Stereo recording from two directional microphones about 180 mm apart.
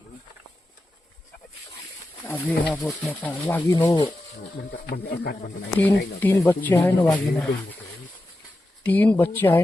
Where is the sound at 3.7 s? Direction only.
25° left (ahead or behind).